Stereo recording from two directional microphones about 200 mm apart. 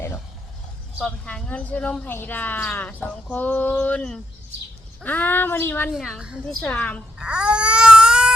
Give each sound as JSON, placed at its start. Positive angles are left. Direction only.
{"t": 0.9, "sound": "speech", "side_deg": 5}
{"t": 5.9, "sound": "a woman's voice", "side_deg": 0}
{"t": 7.2, "sound": "baby cry", "side_deg": -5}